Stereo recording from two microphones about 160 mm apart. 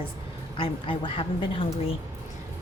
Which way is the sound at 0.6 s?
30° left (ahead or behind).